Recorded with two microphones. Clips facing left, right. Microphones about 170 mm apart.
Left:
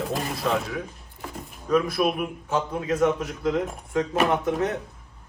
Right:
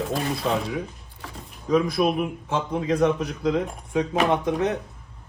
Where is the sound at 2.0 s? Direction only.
Centre (ahead or behind).